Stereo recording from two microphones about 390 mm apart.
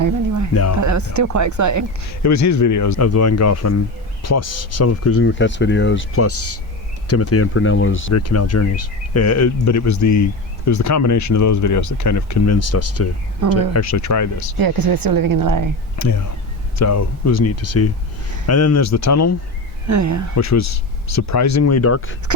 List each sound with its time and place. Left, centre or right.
0.0 s a sound: right
0.8 s speech: right
2.0 s speech: left
14.6 s speech: right
16.0 s speech: left
19.9 s speech: right
20.3 s speech: left